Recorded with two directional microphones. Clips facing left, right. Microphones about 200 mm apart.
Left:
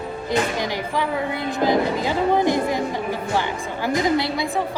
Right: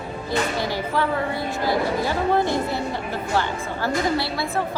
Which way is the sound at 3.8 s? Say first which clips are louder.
Left 3 dB; 15° left (ahead or behind).